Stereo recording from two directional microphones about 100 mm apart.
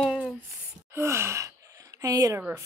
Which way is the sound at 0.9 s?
25° right (ahead or behind).